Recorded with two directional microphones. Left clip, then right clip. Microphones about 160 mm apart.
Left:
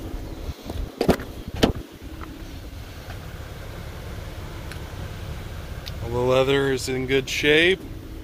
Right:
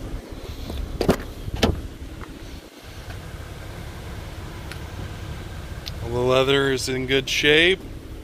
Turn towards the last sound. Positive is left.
turn(degrees=15)  # may be behind; listen again after turning